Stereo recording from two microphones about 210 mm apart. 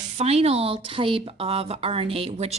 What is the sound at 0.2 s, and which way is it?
A woman's voice, 30° right (ahead or behind).